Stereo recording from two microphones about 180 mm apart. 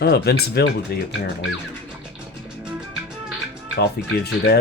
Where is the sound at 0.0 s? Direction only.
65° left (ahead or behind).